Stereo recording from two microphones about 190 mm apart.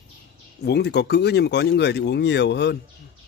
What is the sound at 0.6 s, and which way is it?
Speech, 60° left (ahead or behind).